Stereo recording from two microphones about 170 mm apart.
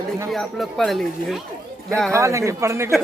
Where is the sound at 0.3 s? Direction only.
Centre (ahead or behind).